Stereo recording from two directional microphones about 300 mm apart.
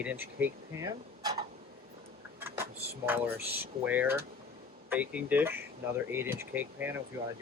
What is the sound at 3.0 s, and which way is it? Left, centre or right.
Speech, centre.